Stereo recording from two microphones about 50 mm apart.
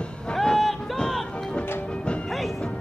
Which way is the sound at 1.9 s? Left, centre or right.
Left.